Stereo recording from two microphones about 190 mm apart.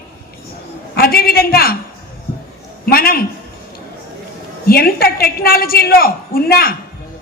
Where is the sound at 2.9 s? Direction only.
50° left (ahead or behind).